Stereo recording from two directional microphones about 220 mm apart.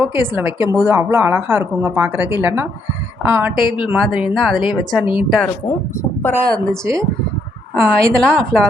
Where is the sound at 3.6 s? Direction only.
20° left (ahead or behind).